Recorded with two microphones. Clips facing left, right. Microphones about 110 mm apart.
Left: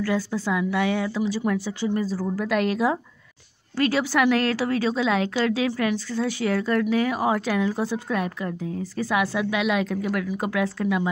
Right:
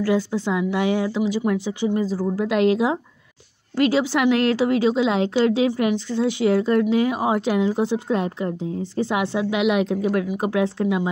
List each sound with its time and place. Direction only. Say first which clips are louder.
0.0 s a woman's voice: right 4 dB; 25° right (ahead or behind)